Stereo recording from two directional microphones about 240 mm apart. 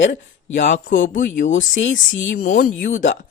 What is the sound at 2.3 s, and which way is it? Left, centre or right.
Speech, left.